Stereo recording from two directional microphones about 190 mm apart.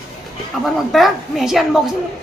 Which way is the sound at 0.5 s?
Centre (ahead or behind).